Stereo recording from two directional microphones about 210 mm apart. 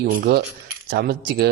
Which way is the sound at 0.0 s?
45° right (ahead or behind).